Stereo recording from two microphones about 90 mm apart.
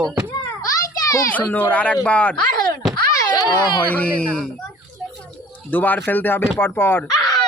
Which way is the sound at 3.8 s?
15° left (ahead or behind).